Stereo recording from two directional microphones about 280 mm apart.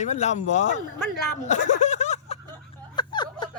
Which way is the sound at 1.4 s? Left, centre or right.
Left.